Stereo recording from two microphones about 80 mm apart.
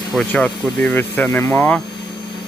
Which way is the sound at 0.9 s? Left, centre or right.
Left.